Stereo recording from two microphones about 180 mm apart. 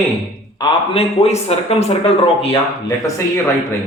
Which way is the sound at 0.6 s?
35° left (ahead or behind).